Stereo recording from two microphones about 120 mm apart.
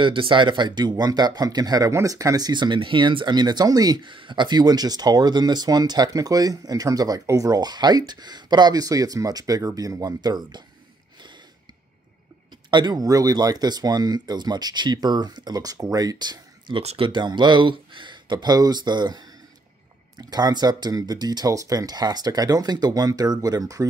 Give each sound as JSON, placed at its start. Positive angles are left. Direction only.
{"t": 0.0, "sound": "speech", "side_deg": -45}
{"t": 12.7, "sound": "speech", "side_deg": -35}
{"t": 16.8, "sound": "speech", "side_deg": -55}
{"t": 17.1, "sound": "speech", "side_deg": -40}